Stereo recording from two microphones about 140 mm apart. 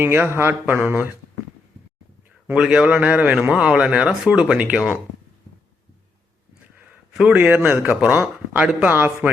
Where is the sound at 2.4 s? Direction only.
5° right (ahead or behind).